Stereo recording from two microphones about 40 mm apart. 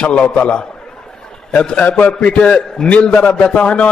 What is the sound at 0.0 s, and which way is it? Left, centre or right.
A man's voice, left.